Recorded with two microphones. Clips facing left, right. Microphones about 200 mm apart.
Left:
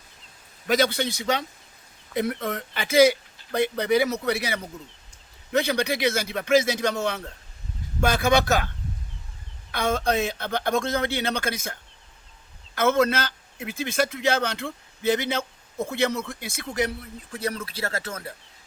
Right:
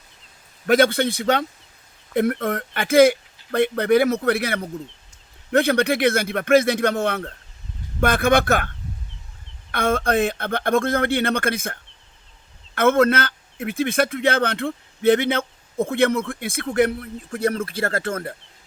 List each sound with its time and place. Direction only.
0.7 s a man's voice: 55° right (ahead or behind)
9.7 s a man's voice: 55° right (ahead or behind)